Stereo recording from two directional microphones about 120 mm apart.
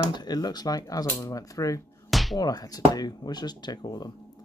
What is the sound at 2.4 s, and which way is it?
Speech, 30° left (ahead or behind).